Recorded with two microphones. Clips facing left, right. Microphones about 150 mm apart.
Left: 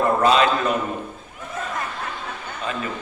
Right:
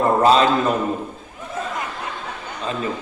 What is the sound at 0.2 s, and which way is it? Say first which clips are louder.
Speech: right 4 dB; 35° right (ahead or behind).